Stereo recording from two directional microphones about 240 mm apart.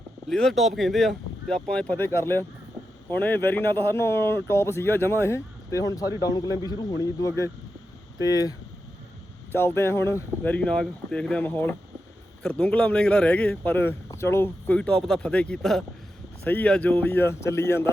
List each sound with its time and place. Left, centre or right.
0.3 s speech: centre